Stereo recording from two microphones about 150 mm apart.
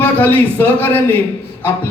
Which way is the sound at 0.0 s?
10° left (ahead or behind).